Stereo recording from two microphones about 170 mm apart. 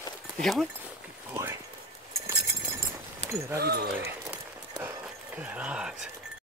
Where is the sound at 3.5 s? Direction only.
70° right (ahead or behind).